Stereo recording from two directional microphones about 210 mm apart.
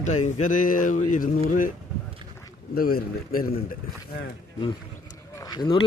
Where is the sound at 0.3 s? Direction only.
35° left (ahead or behind).